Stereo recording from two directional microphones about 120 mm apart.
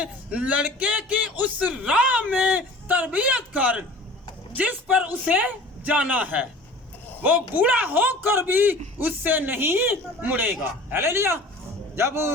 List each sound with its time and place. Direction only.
0.0 s a man's voice: 10° right (ahead or behind)